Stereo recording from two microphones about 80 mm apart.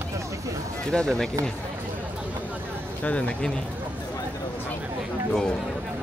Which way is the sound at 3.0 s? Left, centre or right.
Centre.